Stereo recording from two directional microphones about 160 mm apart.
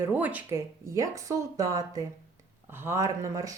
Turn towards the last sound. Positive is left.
turn(degrees=-20)  # may be behind; listen again after turning